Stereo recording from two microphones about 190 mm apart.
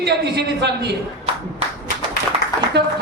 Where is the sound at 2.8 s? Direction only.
60° right (ahead or behind).